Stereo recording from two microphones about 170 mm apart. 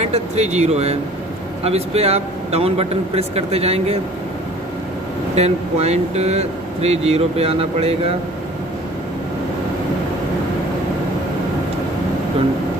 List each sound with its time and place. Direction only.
0.0 s speech: 40° right (ahead or behind)
5.3 s speech: 40° right (ahead or behind)